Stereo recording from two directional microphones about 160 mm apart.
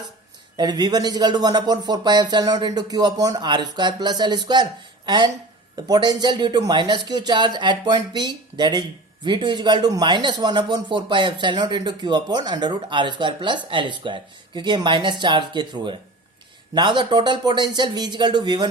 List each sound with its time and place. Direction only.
0.5 s speech: 25° right (ahead or behind)